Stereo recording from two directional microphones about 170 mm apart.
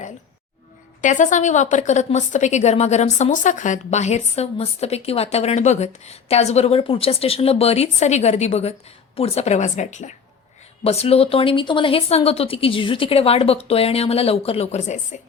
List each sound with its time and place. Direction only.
1.0 s a woman's voice: 45° left (ahead or behind)